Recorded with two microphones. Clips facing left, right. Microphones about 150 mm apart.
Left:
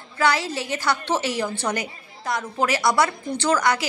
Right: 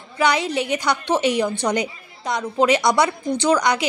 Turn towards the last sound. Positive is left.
turn(degrees=-15)  # may be behind; listen again after turning